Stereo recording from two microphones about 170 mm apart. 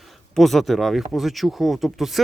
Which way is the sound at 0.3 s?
Centre (ahead or behind).